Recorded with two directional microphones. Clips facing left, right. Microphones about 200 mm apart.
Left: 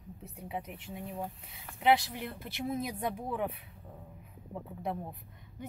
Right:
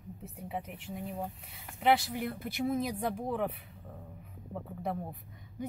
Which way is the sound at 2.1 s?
45° right (ahead or behind).